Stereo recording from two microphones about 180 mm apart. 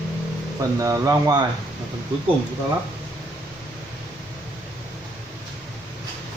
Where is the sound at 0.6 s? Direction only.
20° right (ahead or behind).